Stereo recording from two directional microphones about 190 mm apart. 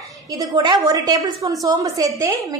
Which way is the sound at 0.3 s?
20° right (ahead or behind).